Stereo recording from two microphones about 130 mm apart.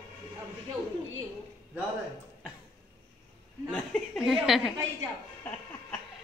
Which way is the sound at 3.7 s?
Centre (ahead or behind).